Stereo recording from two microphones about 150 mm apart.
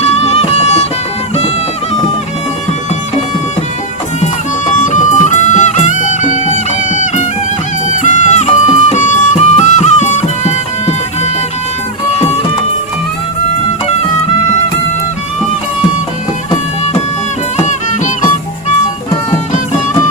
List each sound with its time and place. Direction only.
0.0 s music: 45° left (ahead or behind)
4.8 s music: 55° left (ahead or behind)
17.6 s music: 55° left (ahead or behind)